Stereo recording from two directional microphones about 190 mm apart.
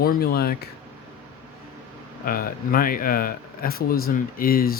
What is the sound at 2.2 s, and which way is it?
Speech, 50° left (ahead or behind).